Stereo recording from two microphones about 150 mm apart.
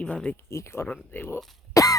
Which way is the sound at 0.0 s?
5° left (ahead or behind).